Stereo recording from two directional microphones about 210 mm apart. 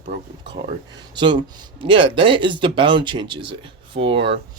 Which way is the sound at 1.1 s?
20° right (ahead or behind).